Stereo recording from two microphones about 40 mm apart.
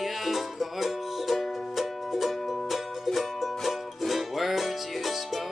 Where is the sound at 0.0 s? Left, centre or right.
Centre.